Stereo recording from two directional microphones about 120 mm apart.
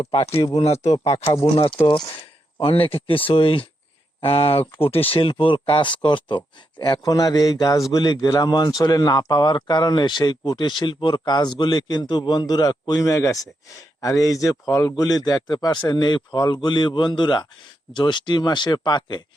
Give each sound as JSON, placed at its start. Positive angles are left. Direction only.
{"t": 0.0, "sound": "speech", "side_deg": 55}
{"t": 1.2, "sound": "speech", "side_deg": 30}
{"t": 2.6, "sound": "speech", "side_deg": 50}
{"t": 7.0, "sound": "speech", "side_deg": 30}